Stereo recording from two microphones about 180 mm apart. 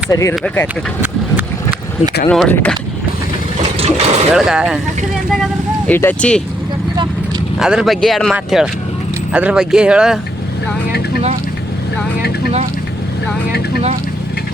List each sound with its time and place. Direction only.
0.1 s speech: 15° left (ahead or behind)
2.3 s speech: 5° left (ahead or behind)
3.6 s vehicle: 35° right (ahead or behind)
4.4 s speech: 5° right (ahead or behind)
5.9 s speech: 10° left (ahead or behind)
7.6 s speech: 5° right (ahead or behind)